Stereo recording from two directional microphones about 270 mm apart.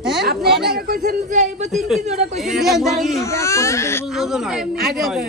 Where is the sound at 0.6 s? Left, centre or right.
Right.